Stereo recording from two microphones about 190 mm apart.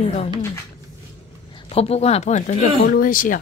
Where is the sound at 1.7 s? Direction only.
30° left (ahead or behind).